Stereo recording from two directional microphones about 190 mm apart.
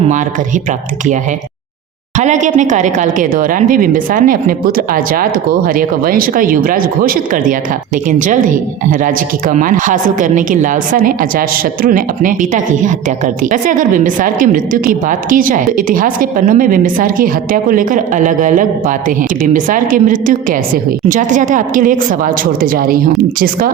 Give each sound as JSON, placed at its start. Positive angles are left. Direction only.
{"t": 0.0, "sound": "speech", "side_deg": -40}
{"t": 2.1, "sound": "speech", "side_deg": -40}